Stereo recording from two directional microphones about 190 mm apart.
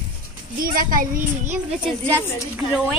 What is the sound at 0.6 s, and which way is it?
A child's voice, 45° right (ahead or behind).